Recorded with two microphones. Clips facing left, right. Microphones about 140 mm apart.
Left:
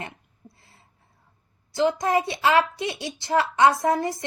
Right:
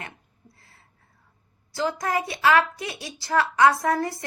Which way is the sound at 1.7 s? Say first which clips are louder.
Left 4 dB; 25° left (ahead or behind).